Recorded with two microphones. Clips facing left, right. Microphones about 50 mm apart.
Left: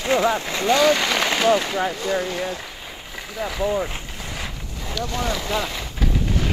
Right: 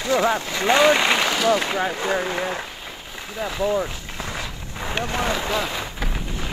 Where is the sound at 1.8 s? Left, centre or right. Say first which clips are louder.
Even; right.